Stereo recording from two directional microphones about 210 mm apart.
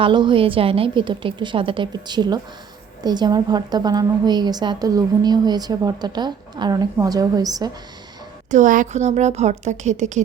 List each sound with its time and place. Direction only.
0.0 s a woman's voice: 20° right (ahead or behind)
8.4 s a woman's voice: 35° right (ahead or behind)